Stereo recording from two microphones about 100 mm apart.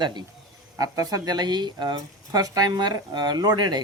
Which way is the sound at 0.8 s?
35° right (ahead or behind).